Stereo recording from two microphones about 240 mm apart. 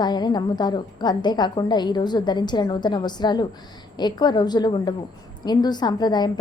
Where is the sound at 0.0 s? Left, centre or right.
Centre.